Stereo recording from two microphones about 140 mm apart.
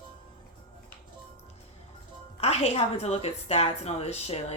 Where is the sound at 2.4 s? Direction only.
50° left (ahead or behind).